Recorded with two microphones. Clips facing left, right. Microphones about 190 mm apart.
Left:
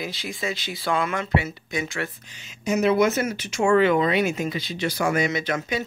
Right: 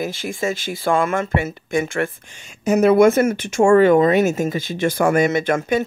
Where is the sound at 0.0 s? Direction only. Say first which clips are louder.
Right 7 dB; 50° right (ahead or behind).